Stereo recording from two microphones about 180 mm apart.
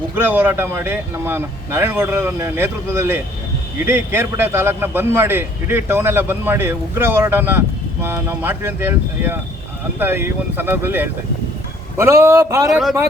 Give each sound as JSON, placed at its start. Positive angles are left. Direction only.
{"t": 0.2, "sound": "a man's voice", "side_deg": -10}
{"t": 12.7, "sound": "a man's voice", "side_deg": 0}